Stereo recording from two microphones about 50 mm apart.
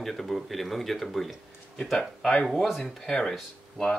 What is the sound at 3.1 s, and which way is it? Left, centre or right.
Speech, centre.